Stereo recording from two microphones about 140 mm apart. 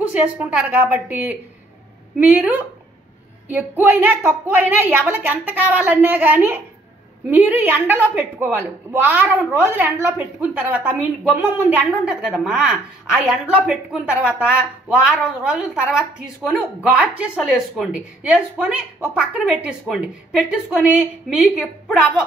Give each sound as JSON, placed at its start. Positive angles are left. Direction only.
{"t": 0.1, "sound": "a woman's voice", "side_deg": -10}